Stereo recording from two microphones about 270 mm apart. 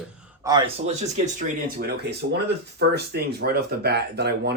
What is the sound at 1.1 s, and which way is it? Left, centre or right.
Speech, right.